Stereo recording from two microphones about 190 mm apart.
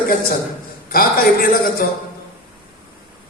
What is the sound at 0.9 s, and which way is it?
Speech, 50° left (ahead or behind).